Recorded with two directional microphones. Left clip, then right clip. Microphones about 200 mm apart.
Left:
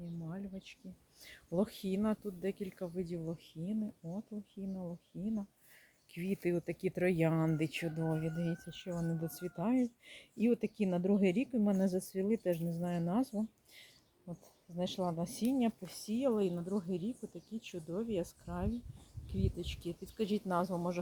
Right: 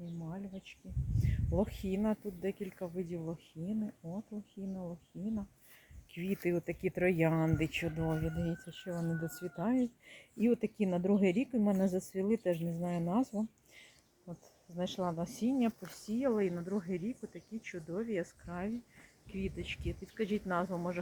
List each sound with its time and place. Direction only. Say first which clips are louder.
0.3 s a sound: right 1 dB; 5° right (ahead or behind)
1.2 s speech: right 1 dB; 5° left (ahead or behind)
14.9 s speech: right 1 dB; 10° left (ahead or behind)
16.6 s speech: even; centre (ahead or behind)
18.1 s speech: even; 15° left (ahead or behind)